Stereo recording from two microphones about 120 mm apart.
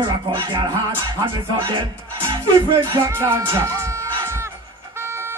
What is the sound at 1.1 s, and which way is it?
Music, 45° right (ahead or behind).